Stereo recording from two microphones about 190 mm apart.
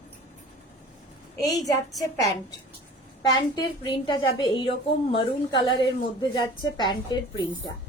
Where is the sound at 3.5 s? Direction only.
25° left (ahead or behind).